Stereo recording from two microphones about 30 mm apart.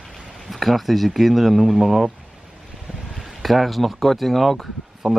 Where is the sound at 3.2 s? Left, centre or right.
Centre.